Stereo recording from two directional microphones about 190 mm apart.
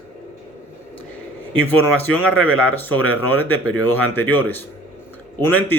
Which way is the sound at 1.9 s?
5° left (ahead or behind).